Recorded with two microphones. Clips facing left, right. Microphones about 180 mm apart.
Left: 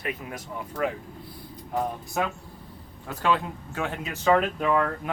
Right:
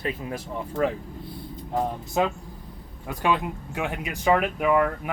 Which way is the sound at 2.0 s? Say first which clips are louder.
Right 4 dB; 20° right (ahead or behind).